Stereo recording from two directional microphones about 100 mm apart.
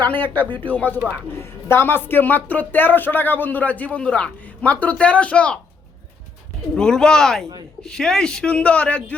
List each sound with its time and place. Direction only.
0.1 s speech: 20° left (ahead or behind)
6.7 s speech: 5° left (ahead or behind)